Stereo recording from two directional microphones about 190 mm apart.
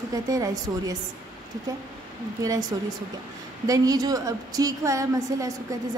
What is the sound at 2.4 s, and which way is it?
A woman's voice, 20° right (ahead or behind).